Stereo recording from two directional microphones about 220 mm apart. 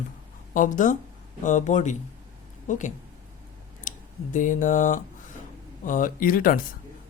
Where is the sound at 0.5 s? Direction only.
35° left (ahead or behind).